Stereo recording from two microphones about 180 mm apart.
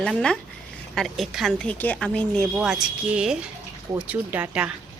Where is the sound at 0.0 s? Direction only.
5° left (ahead or behind).